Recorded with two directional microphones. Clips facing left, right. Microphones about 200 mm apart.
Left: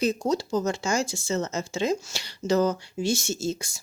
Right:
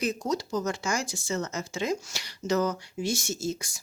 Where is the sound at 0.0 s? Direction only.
30° left (ahead or behind).